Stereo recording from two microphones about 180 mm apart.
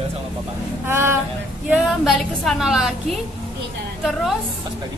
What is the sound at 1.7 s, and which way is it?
A woman's voice, centre (ahead or behind).